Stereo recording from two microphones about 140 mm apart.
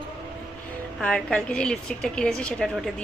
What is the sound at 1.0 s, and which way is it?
A woman's voice, 5° left (ahead or behind).